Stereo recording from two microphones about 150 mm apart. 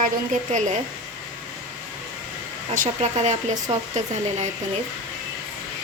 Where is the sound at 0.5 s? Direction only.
55° right (ahead or behind).